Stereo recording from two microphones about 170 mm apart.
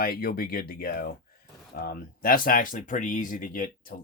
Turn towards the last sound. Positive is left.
turn(degrees=55)  # may be behind; listen again after turning